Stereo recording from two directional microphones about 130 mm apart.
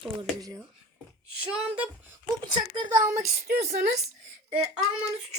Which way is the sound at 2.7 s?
30° right (ahead or behind).